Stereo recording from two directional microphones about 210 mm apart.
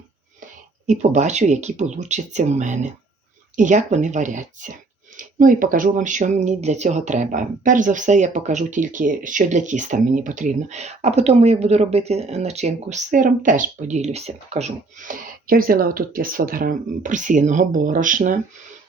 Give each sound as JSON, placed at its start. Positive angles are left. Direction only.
{"t": 0.9, "sound": "speech", "side_deg": -35}